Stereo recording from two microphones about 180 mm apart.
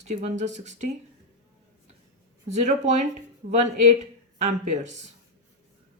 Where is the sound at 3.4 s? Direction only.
55° right (ahead or behind).